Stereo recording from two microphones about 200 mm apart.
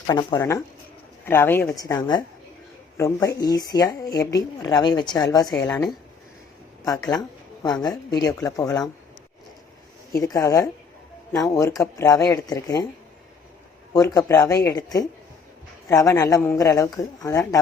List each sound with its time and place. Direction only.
0.1 s speech: 20° left (ahead or behind)
5.5 s speech: 5° left (ahead or behind)
7.1 s speech: 20° left (ahead or behind)
10.2 s speech: 15° left (ahead or behind)
13.9 s speech: 15° left (ahead or behind)